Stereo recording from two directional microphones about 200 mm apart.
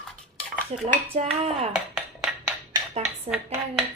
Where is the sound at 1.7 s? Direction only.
5° right (ahead or behind).